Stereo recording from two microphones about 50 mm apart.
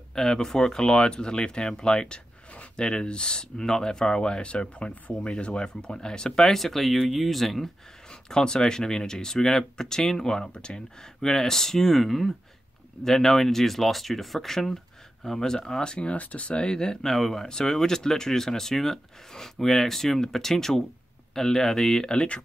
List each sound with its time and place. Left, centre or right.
0.1 s speech: centre
8.1 s speech: centre
17.1 s speech: centre
22.1 s speech: left